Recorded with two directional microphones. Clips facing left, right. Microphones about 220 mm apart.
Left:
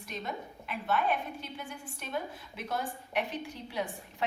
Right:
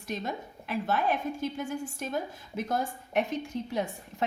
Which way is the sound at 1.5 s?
45° right (ahead or behind).